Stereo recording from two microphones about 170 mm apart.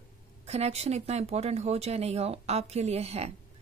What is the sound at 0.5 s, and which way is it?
A woman's voice, 40° right (ahead or behind).